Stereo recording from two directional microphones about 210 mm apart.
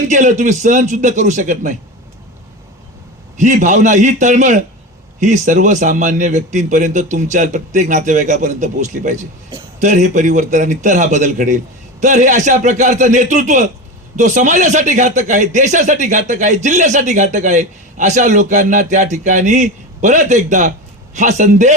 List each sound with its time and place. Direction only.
0.1 s speech: 35° right (ahead or behind)
3.3 s speech: 35° right (ahead or behind)